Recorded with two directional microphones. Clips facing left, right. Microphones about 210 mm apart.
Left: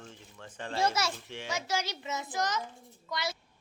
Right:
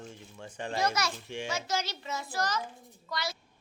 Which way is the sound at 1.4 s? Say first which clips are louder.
Even; 15° left (ahead or behind).